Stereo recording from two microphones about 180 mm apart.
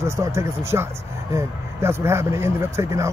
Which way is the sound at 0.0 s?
15° right (ahead or behind).